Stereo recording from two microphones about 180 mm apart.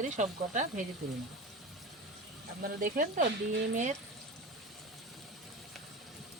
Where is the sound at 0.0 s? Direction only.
45° right (ahead or behind).